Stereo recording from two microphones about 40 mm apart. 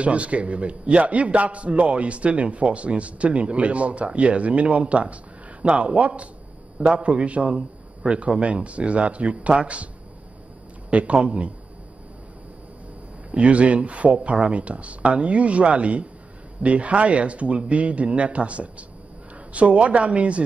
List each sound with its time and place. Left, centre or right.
0.0 s a man's voice: right
10.9 s a man's voice: right
13.3 s a man's voice: right